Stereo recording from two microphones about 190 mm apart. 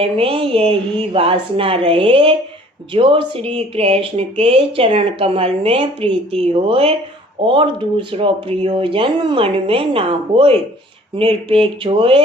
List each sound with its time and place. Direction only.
0.0 s speech: 30° right (ahead or behind)